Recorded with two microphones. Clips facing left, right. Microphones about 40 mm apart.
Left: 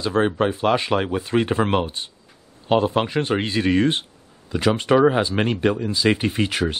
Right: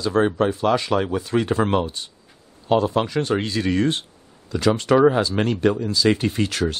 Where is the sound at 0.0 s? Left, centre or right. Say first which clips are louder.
Right 1 dB; left.